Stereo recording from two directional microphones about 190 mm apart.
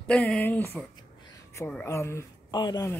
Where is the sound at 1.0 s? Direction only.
20° left (ahead or behind).